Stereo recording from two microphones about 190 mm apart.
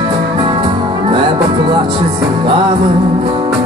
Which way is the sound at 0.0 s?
25° right (ahead or behind).